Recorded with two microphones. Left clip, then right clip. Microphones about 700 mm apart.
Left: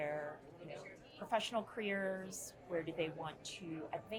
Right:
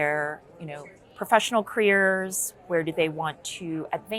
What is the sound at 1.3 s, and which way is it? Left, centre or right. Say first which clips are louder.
A woman's voice: right 16 dB; right.